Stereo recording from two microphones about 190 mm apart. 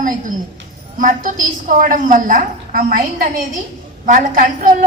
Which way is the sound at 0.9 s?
45° right (ahead or behind).